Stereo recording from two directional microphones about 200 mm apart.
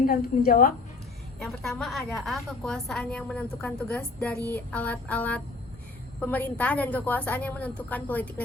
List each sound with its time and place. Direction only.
0.0 s a woman's voice: 45° left (ahead or behind)
1.4 s a woman's voice: centre (ahead or behind)